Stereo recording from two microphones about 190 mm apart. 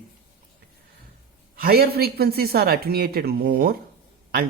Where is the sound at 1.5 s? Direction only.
55° right (ahead or behind).